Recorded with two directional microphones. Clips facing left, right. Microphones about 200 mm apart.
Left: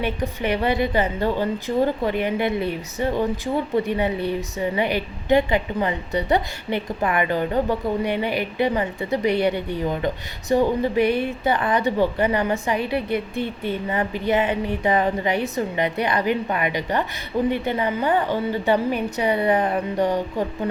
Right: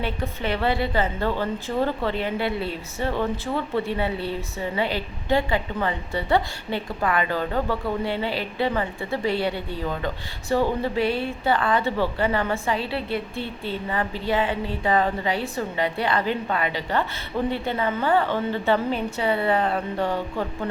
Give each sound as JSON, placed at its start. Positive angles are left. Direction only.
{"t": 0.0, "sound": "a woman's voice", "side_deg": 15}